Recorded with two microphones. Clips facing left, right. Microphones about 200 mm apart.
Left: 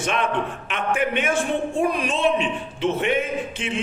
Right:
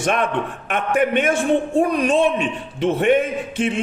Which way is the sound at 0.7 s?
50° right (ahead or behind).